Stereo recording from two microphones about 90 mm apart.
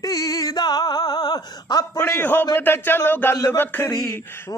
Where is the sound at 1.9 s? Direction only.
25° left (ahead or behind).